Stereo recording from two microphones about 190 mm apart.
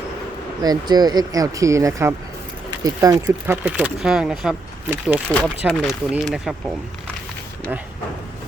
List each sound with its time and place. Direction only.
0.6 s speech: 20° right (ahead or behind)
5.3 s speech: 5° left (ahead or behind)